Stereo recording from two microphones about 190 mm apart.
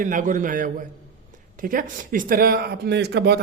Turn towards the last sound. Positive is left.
turn(degrees=-60)  # may be behind; listen again after turning